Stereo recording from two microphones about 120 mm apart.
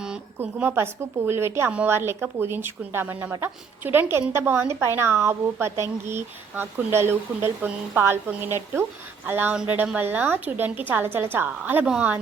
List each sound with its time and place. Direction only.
0.3 s a woman's voice: 15° right (ahead or behind)